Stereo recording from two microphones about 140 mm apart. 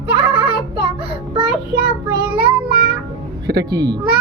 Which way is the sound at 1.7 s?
90° right.